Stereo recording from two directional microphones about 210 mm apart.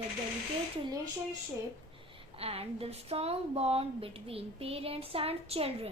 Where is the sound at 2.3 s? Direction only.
30° right (ahead or behind).